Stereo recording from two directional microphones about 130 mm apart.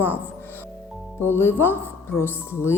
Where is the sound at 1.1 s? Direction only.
15° left (ahead or behind).